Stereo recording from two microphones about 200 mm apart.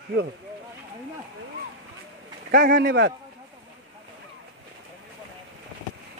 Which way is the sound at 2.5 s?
45° right (ahead or behind).